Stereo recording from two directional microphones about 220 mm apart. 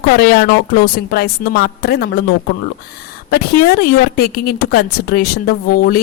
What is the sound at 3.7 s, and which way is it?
A woman's voice, 45° left (ahead or behind).